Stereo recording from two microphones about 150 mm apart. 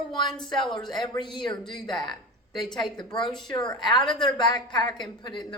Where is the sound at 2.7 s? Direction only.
30° left (ahead or behind).